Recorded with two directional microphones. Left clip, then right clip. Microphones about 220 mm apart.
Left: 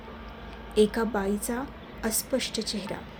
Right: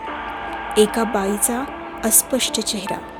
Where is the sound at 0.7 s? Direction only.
45° right (ahead or behind).